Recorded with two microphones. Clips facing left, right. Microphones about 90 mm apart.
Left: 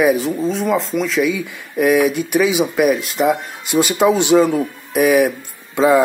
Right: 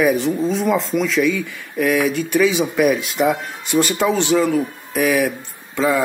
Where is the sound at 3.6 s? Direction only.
15° left (ahead or behind).